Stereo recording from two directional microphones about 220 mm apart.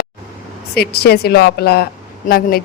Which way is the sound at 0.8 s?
45° left (ahead or behind).